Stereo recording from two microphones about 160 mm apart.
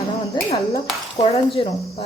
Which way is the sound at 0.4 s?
30° left (ahead or behind).